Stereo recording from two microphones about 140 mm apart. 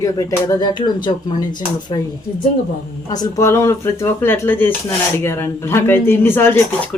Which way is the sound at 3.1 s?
25° left (ahead or behind).